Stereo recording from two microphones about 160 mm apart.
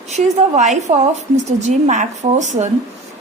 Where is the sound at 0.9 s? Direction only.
40° right (ahead or behind).